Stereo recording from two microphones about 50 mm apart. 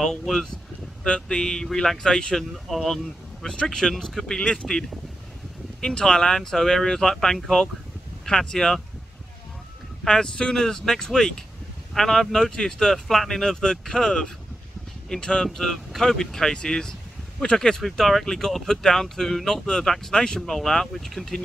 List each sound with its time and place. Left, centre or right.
0.0 s speech: centre
4.4 s speech: left
5.8 s speech: centre
10.0 s speech: centre